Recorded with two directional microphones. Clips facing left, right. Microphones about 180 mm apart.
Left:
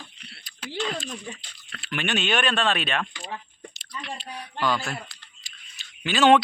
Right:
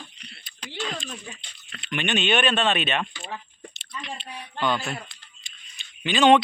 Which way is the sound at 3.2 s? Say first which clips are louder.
Even; 5° right (ahead or behind).